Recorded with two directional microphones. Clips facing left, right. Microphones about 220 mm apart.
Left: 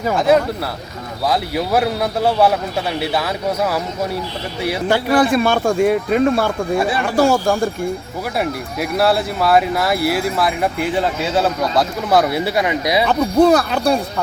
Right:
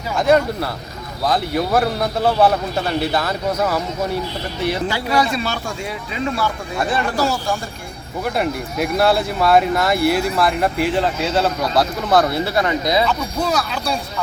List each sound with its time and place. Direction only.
0.2 s a man's voice: 5° left (ahead or behind)
4.9 s speech: 55° left (ahead or behind)
8.4 s speech: centre (ahead or behind)
13.1 s speech: 55° left (ahead or behind)